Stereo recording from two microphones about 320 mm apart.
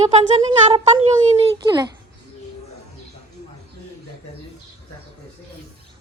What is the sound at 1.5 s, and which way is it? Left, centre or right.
Speech, centre.